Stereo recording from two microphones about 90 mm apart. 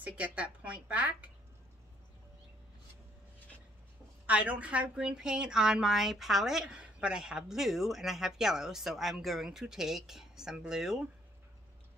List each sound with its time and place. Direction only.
0.0 s a woman's voice: 15° right (ahead or behind)
4.3 s a woman's voice: 15° right (ahead or behind)